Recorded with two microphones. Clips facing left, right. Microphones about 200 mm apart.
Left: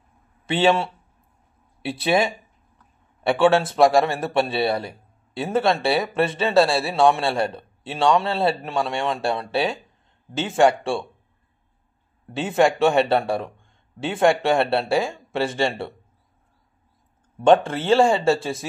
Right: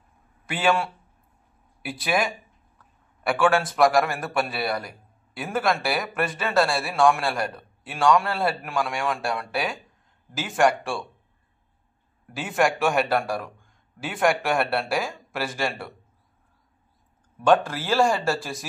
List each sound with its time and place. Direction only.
0.5 s a man's voice: 25° left (ahead or behind)
12.3 s a man's voice: 25° left (ahead or behind)
17.4 s a man's voice: 25° left (ahead or behind)